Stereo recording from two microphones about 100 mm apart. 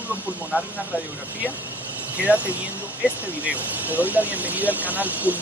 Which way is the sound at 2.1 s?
15° right (ahead or behind).